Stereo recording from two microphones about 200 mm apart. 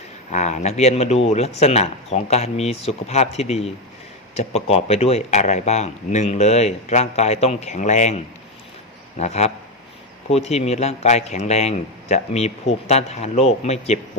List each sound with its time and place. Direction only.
0.3 s speech: 35° left (ahead or behind)